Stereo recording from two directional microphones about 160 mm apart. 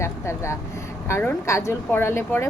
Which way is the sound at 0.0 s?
15° left (ahead or behind).